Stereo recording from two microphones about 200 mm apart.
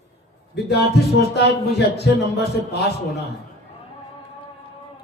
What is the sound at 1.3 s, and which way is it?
Speech, 55° left (ahead or behind).